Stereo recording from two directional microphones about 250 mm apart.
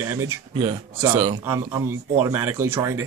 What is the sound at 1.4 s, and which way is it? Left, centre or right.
Speech, centre.